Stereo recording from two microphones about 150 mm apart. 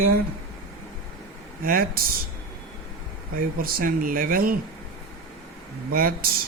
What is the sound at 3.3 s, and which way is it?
Speech, 75° right (ahead or behind).